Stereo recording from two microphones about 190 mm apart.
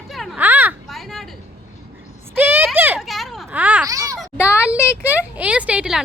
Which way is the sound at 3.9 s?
20° right (ahead or behind).